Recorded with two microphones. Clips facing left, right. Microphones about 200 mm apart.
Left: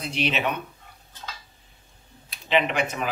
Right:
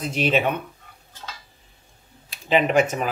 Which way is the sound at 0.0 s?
45° right (ahead or behind).